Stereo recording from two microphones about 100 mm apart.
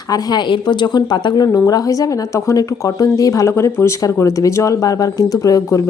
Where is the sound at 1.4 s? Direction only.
35° left (ahead or behind).